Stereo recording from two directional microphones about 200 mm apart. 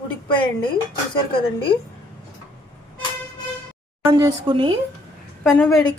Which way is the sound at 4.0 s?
15° right (ahead or behind).